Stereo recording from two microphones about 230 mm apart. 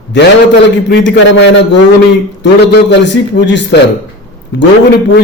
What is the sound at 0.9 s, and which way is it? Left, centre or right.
A man's voice, left.